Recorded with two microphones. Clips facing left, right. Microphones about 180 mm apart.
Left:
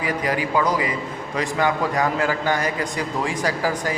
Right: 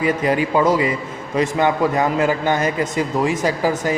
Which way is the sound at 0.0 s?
25° right (ahead or behind).